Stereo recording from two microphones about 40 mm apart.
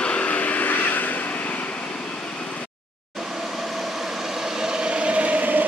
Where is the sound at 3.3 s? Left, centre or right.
Centre.